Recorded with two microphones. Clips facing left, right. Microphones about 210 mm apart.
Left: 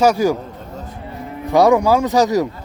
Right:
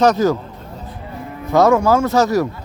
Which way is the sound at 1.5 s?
15° left (ahead or behind).